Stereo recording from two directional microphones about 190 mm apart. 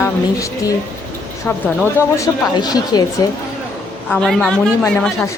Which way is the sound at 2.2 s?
20° left (ahead or behind).